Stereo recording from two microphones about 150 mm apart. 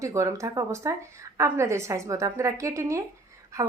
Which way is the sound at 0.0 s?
20° right (ahead or behind).